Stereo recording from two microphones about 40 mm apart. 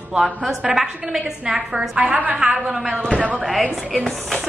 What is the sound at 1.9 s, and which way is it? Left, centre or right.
Speech, right.